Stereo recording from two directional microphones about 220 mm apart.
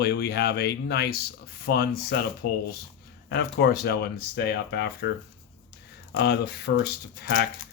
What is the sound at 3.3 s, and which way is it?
Speech, 50° left (ahead or behind).